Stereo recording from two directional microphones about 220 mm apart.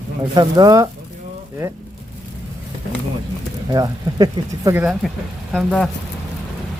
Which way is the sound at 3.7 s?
15° right (ahead or behind).